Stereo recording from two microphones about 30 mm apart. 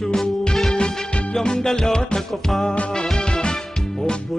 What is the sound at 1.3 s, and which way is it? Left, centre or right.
Music, left.